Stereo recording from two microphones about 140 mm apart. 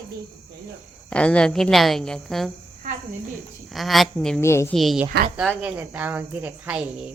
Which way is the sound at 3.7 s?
Centre (ahead or behind).